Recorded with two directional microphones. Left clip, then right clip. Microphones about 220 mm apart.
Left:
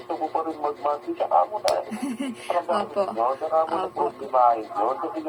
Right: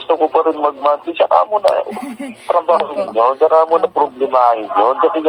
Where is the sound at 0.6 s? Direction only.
55° right (ahead or behind).